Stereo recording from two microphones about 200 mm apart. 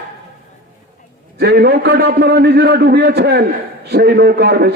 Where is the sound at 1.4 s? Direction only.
55° right (ahead or behind).